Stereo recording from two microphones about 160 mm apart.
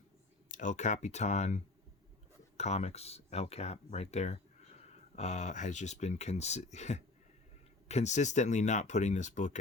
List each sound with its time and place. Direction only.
0.5 s speech: 50° left (ahead or behind)